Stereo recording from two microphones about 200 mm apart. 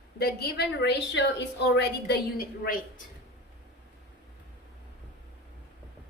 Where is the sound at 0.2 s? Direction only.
50° left (ahead or behind).